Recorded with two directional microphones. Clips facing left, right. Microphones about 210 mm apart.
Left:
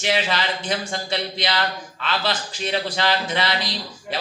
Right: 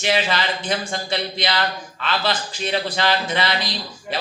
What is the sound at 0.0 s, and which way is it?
Speech, 55° right (ahead or behind).